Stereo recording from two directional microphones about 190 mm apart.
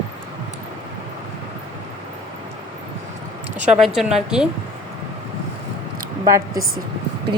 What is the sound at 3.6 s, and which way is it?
Speech, centre (ahead or behind).